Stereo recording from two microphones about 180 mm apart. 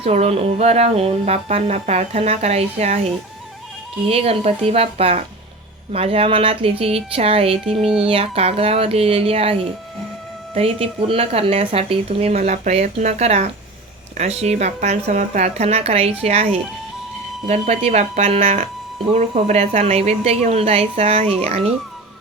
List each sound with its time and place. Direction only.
0.0 s speech: 35° right (ahead or behind)
4.1 s speech: 35° right (ahead or behind)